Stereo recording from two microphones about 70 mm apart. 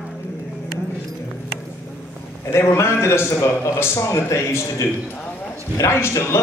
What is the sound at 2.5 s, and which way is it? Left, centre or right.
A man's voice, left.